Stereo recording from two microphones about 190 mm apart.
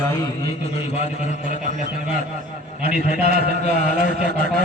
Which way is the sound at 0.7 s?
35° left (ahead or behind).